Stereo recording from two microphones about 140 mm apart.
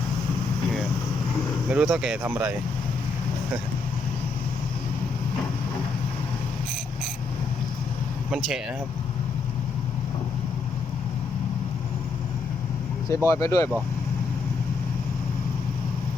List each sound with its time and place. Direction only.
1.7 s speech: 5° right (ahead or behind)
13.2 s speech: 20° left (ahead or behind)